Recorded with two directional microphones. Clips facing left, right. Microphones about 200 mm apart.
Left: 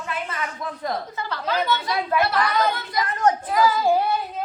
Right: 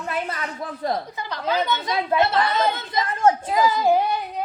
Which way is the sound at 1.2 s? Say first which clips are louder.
Right 1 dB; 15° right (ahead or behind).